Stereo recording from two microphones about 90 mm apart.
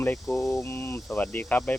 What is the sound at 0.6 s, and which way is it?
Speech, 30° left (ahead or behind).